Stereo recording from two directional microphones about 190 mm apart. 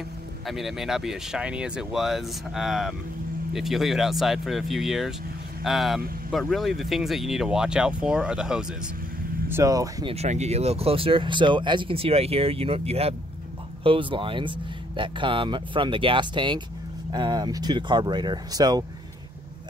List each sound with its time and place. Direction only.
0.5 s speech: centre (ahead or behind)
9.5 s speech: 15° right (ahead or behind)
10.1 s speech: 35° right (ahead or behind)